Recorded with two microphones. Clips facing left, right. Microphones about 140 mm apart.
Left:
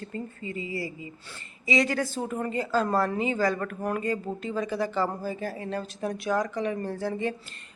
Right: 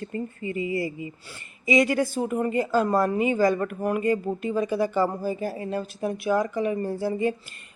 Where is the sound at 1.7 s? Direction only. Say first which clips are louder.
Right 4 dB; 15° right (ahead or behind).